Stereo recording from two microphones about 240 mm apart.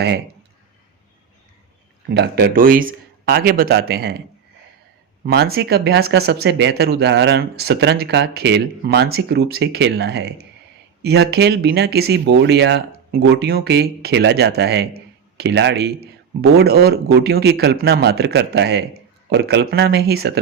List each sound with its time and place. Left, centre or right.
2.0 s speech: right
5.2 s speech: right